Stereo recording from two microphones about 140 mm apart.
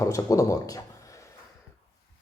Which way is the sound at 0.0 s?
25° left (ahead or behind).